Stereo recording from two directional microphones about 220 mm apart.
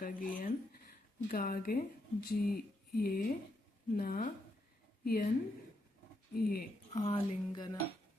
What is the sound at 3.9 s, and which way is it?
Speech, 40° left (ahead or behind).